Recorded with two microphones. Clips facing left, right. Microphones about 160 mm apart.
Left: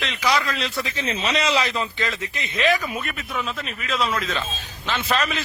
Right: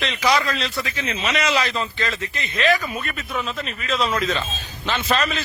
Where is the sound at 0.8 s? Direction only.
30° left (ahead or behind).